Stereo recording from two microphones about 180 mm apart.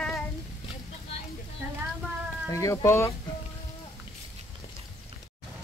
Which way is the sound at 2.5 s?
15° left (ahead or behind).